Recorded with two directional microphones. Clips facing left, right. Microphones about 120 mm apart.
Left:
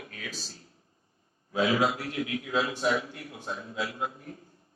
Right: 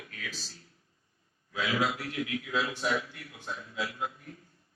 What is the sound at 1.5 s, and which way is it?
A man's voice, 30° left (ahead or behind).